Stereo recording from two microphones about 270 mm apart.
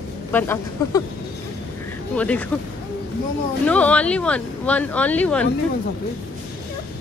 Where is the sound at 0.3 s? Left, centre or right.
Centre.